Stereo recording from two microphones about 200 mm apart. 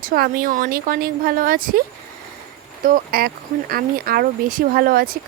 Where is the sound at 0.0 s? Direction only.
45° right (ahead or behind).